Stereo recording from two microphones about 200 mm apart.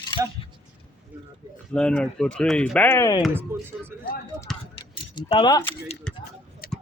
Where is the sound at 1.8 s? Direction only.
5° left (ahead or behind).